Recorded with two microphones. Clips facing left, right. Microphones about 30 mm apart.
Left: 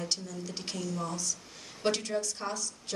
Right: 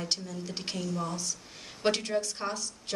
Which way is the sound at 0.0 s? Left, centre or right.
Right.